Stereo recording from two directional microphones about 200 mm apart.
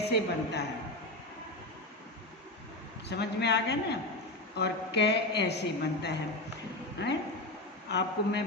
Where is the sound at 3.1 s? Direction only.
55° left (ahead or behind).